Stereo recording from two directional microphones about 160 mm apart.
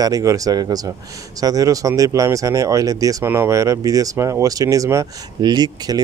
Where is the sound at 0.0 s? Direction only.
20° right (ahead or behind).